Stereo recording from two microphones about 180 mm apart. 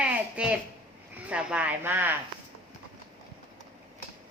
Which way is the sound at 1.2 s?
5° right (ahead or behind).